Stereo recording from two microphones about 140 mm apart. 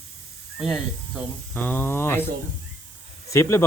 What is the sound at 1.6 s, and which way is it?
Speech, 15° left (ahead or behind).